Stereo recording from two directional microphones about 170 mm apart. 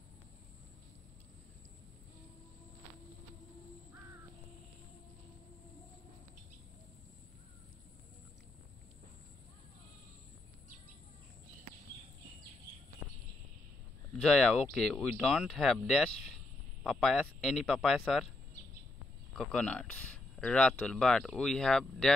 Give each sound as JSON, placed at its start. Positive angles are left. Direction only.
{"t": 13.0, "sound": "a sound", "side_deg": 15}
{"t": 14.1, "sound": "speech", "side_deg": 5}
{"t": 19.3, "sound": "speech", "side_deg": 5}